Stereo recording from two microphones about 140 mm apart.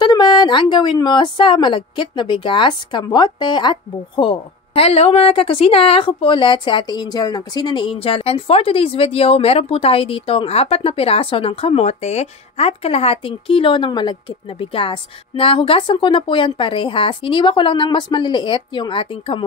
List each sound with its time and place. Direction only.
0.0 s a woman's voice: 30° left (ahead or behind)